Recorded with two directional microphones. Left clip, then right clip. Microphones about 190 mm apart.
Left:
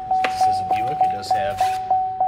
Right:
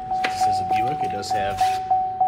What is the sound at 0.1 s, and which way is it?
Doorbell, 30° left (ahead or behind).